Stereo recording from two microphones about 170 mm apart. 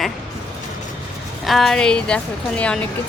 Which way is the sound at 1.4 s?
Centre (ahead or behind).